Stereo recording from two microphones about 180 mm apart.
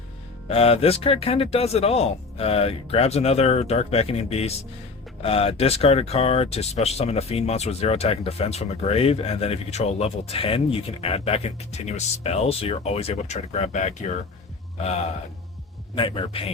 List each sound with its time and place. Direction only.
0.4 s speech: 35° left (ahead or behind)
16.0 s a man's voice: 30° left (ahead or behind)